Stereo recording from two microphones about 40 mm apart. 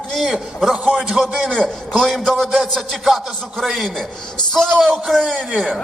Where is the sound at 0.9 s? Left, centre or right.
Centre.